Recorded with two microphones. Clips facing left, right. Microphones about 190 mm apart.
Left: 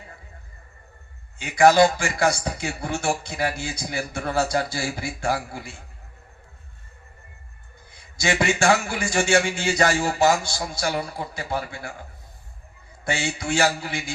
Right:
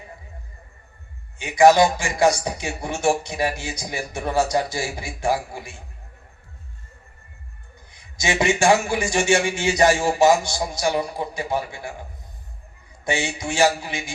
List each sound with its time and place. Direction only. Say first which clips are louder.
1.4 s a man's voice: right 1 dB; 15° right (ahead or behind)
7.9 s a man's voice: even; 20° right (ahead or behind)
13.1 s a man's voice: right 1 dB; 20° right (ahead or behind)